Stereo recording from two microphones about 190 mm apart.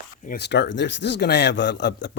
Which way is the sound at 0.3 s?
65° left (ahead or behind).